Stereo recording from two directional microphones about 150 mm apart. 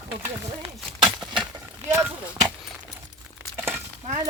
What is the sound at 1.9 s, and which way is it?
Speech, 15° right (ahead or behind).